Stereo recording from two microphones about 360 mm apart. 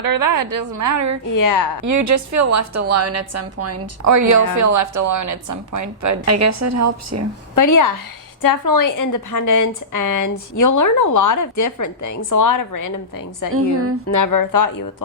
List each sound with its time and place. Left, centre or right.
0.0 s a woman's voice: right
1.3 s a woman's voice: left
1.8 s a woman's voice: right
7.5 s a woman's voice: left